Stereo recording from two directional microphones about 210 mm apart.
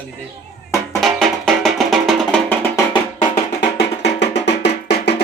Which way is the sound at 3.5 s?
55° left (ahead or behind).